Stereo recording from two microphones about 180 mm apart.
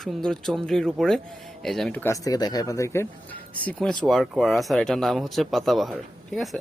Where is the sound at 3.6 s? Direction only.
5° left (ahead or behind).